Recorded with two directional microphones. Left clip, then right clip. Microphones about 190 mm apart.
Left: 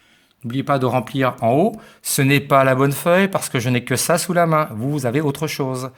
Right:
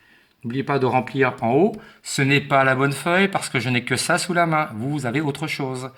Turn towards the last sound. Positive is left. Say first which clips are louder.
# left 3 dB
turn(degrees=50)  # may be behind; listen again after turning